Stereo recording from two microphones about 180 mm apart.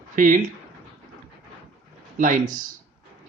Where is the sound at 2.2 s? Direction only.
45° right (ahead or behind).